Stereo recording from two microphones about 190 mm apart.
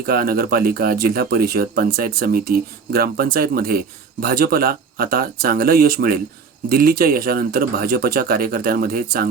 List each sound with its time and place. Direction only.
0.0 s speech: 50° right (ahead or behind)